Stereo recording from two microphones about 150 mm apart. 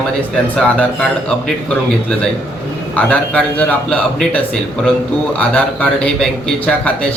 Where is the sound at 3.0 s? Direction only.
10° left (ahead or behind).